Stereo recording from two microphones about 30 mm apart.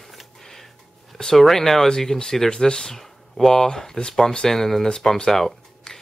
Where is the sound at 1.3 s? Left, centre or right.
Centre.